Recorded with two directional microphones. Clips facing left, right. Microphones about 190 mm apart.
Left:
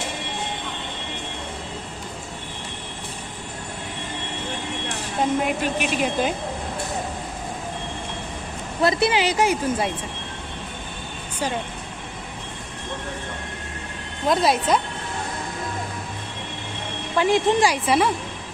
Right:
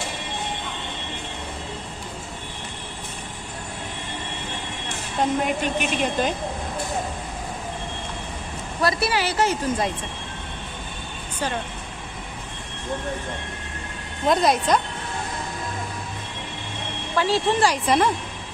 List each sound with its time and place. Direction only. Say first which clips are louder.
5.4 s speech: even; 5° left (ahead or behind)
8.8 s speech: left 3 dB; 25° left (ahead or behind)
14.3 s speech: even; 5° left (ahead or behind)
17.2 s speech: left 2 dB; 15° left (ahead or behind)